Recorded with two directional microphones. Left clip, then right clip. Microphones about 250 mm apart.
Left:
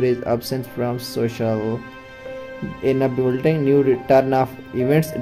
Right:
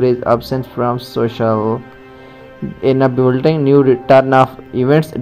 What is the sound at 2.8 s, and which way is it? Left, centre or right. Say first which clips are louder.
Speech: right 7 dB; centre.